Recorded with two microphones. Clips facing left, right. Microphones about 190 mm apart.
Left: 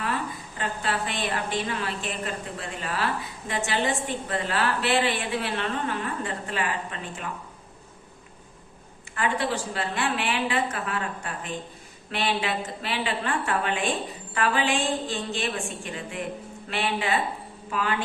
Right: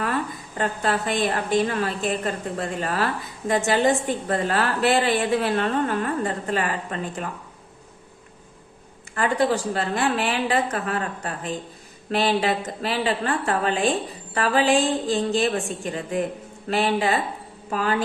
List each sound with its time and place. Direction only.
0.5 s a woman's voice: 45° right (ahead or behind)
9.1 s a woman's voice: 40° right (ahead or behind)